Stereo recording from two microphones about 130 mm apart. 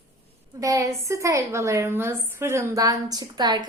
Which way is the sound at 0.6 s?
25° right (ahead or behind).